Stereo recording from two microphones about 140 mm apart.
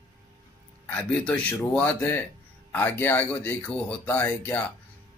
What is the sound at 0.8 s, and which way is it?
Speech, 10° left (ahead or behind).